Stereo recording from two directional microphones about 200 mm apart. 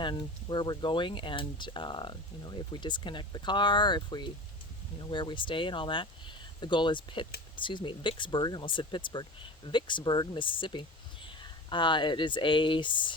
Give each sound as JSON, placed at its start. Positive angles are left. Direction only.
{"t": 0.0, "sound": "speech", "side_deg": 20}